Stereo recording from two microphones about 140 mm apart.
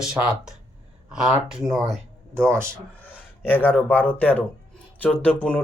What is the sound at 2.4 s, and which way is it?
Speech, 20° right (ahead or behind).